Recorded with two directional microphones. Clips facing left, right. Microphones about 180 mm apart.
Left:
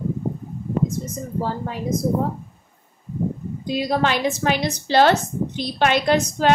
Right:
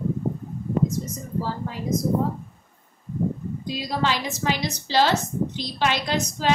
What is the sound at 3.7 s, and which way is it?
A woman's voice, 60° left (ahead or behind).